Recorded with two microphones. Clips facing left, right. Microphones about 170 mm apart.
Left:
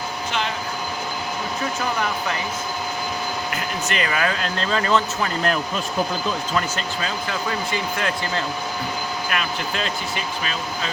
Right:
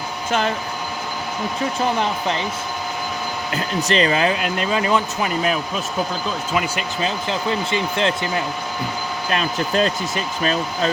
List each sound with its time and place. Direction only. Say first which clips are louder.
0.3 s speech: right 6 dB; 45° right (ahead or behind)
1.8 s speech: right 5 dB; 25° right (ahead or behind)
3.8 s speech: right 6 dB; 30° right (ahead or behind); by 6.8 s 10° right (ahead or behind)
7.0 s speech: right 6 dB; 25° right (ahead or behind)
9.3 s speech: right 8 dB; 35° right (ahead or behind)